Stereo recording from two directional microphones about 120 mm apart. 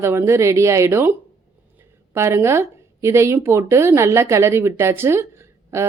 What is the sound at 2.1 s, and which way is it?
A woman's voice, 20° right (ahead or behind).